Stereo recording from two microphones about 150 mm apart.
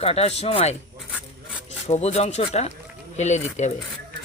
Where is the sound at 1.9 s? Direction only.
45° left (ahead or behind).